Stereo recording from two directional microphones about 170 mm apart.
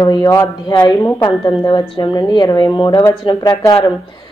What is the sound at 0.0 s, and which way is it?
A woman's voice, 25° left (ahead or behind).